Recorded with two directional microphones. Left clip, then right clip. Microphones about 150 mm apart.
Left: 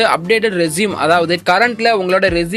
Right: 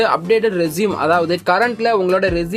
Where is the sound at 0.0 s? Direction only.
15° left (ahead or behind).